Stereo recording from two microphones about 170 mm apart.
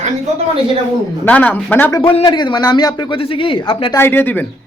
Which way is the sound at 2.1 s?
30° left (ahead or behind).